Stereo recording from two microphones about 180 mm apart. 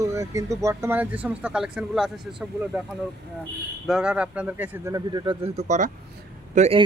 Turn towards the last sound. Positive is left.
turn(degrees=-40)  # may be behind; listen again after turning